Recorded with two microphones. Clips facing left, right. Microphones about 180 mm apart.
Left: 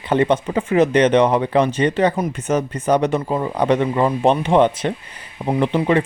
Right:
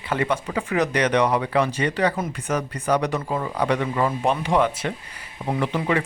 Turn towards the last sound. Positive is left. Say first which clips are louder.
# left 6 dB
turn(degrees=25)  # may be behind; listen again after turning